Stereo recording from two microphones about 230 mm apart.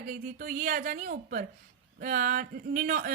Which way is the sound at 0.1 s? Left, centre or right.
Right.